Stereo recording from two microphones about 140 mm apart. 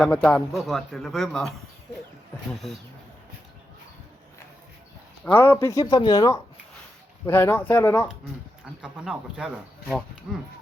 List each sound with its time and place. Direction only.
0.0 s speech: 5° left (ahead or behind)
5.2 s speech: 15° left (ahead or behind)
7.3 s speech: 15° left (ahead or behind)
8.8 s speech: 5° right (ahead or behind)